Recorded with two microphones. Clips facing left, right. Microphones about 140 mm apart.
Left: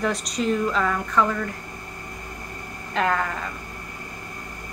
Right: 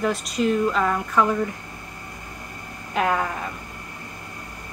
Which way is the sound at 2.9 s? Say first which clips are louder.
Right 1 dB; 10° right (ahead or behind).